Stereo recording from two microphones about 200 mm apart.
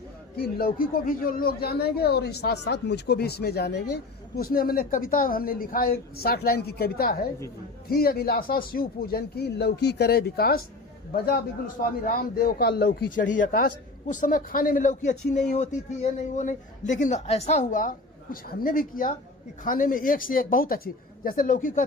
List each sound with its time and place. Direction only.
0.3 s a woman's voice: 50° left (ahead or behind)